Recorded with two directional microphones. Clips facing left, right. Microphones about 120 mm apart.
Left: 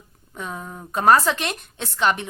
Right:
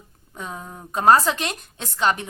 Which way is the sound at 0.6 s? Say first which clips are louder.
Left 2 dB; 15° right (ahead or behind).